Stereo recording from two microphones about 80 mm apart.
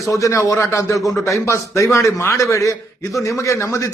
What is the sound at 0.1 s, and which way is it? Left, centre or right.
A man's voice, left.